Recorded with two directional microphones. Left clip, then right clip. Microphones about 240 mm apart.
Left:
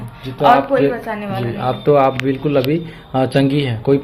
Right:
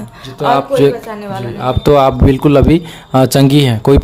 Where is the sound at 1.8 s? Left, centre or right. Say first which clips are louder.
Right 4 dB; right.